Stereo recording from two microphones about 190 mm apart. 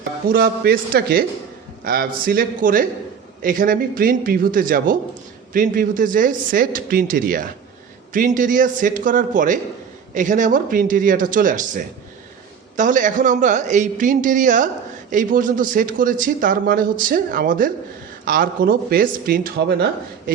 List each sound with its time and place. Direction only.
0.3 s a man's voice: 50° right (ahead or behind)